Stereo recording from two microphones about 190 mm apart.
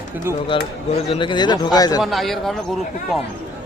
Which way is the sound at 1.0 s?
25° left (ahead or behind).